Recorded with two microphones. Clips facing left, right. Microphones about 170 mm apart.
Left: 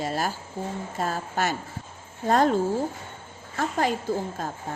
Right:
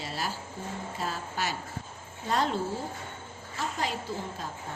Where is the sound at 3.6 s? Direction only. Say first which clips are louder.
Left 7 dB; 55° left (ahead or behind).